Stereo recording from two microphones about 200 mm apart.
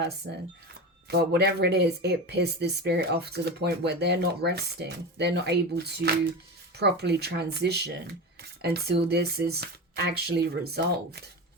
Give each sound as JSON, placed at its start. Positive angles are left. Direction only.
{"t": 0.2, "sound": "speech", "side_deg": -50}